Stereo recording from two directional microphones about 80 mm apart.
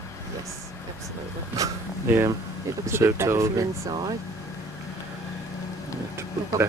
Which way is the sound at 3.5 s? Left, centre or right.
Right.